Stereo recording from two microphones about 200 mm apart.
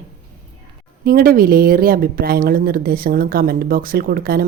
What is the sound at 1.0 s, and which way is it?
Speech, 45° right (ahead or behind).